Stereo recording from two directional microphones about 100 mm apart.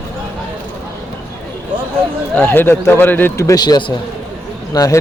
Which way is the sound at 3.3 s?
40° left (ahead or behind).